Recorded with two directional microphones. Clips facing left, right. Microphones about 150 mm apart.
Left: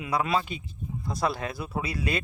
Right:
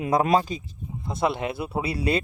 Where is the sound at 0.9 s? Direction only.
25° right (ahead or behind).